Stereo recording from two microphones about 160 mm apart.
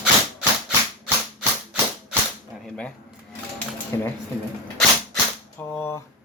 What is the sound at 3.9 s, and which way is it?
Speech, 20° left (ahead or behind).